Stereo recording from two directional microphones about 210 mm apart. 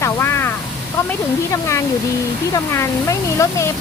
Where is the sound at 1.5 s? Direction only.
15° left (ahead or behind).